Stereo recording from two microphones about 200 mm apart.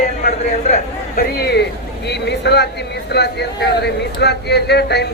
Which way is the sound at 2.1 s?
55° left (ahead or behind).